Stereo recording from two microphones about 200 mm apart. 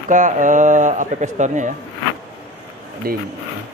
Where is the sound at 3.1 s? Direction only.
45° right (ahead or behind).